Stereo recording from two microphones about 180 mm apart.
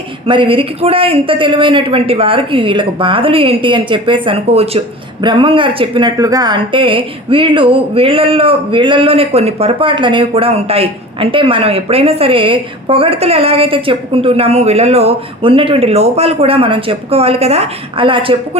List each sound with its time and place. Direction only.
0.3 s a man's voice: 30° right (ahead or behind)